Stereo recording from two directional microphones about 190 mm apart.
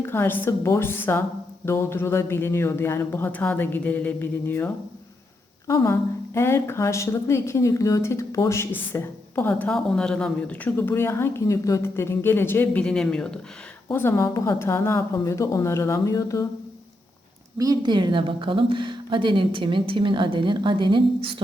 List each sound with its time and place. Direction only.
0.0 s a woman's voice: 10° left (ahead or behind)
17.6 s speech: 20° right (ahead or behind)